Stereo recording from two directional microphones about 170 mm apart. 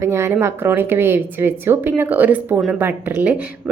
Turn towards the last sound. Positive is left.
turn(degrees=-10)  # may be behind; listen again after turning